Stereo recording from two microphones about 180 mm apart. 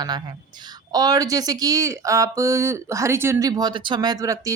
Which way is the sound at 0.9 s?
20° right (ahead or behind).